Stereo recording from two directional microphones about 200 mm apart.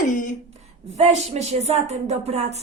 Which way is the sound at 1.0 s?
35° right (ahead or behind).